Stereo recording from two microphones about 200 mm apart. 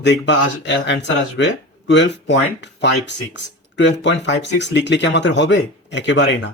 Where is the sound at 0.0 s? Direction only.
60° left (ahead or behind).